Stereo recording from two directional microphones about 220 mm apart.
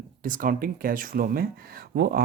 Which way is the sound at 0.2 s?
40° right (ahead or behind).